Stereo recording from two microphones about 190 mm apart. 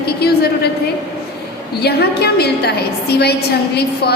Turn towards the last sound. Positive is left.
turn(degrees=60)  # may be behind; listen again after turning